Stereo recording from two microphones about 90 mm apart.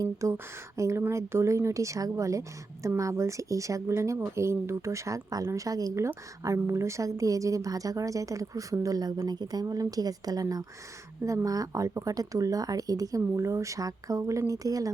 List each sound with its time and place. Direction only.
0.0 s a woman's voice: 35° right (ahead or behind)